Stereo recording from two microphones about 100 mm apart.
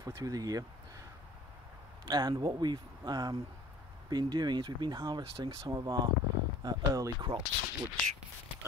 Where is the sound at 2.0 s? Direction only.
45° right (ahead or behind).